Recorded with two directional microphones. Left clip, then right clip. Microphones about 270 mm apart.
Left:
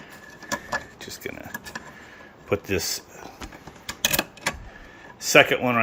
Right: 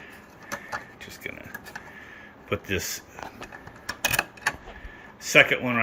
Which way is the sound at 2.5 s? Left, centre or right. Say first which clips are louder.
Left 4 dB; centre.